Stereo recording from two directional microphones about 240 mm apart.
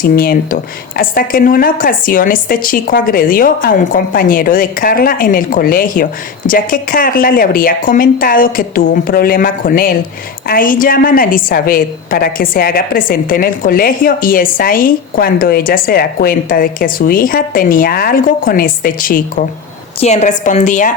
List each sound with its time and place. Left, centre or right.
0.0 s a woman's voice: left